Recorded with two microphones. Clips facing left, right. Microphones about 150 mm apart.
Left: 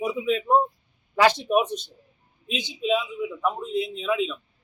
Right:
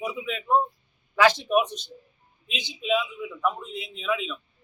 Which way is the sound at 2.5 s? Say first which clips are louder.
Left 2 dB; 40° left (ahead or behind).